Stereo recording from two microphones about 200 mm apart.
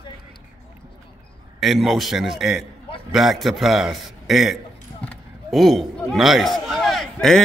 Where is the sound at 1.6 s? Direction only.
Centre (ahead or behind).